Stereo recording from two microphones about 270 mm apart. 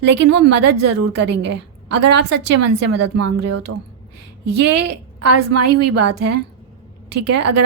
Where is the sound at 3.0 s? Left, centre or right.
Right.